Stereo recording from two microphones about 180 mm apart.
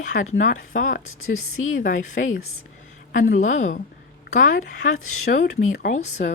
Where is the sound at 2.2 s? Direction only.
60° left (ahead or behind).